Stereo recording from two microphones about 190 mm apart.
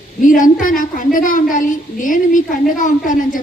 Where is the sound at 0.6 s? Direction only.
45° left (ahead or behind).